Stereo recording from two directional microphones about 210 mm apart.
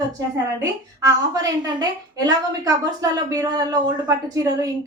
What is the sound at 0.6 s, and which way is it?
A woman's voice, 15° right (ahead or behind).